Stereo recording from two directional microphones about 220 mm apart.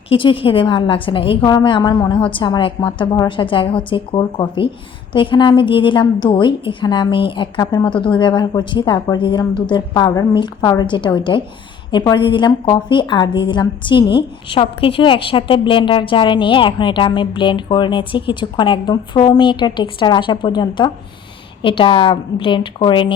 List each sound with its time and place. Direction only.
0.1 s a woman's voice: 25° left (ahead or behind)